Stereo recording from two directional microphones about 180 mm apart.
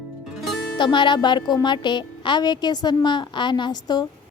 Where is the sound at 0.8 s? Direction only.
25° left (ahead or behind).